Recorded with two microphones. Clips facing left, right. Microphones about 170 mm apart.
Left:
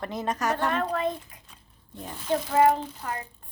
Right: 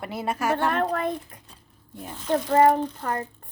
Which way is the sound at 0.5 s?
55° right (ahead or behind).